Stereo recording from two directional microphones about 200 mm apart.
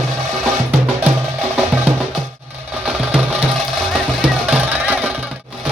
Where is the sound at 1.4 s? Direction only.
5° right (ahead or behind).